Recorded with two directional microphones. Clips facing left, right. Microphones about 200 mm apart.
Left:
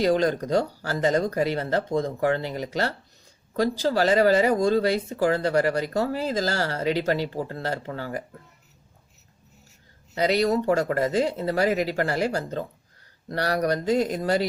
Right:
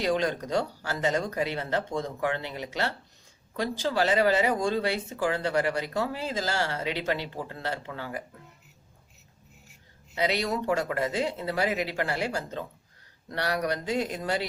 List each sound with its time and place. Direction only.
0.0 s speech: 40° left (ahead or behind)
10.2 s speech: 40° left (ahead or behind)